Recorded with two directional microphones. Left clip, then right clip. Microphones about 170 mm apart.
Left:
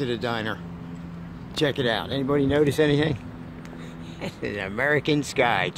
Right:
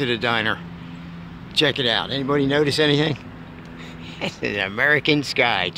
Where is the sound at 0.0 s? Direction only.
10° right (ahead or behind).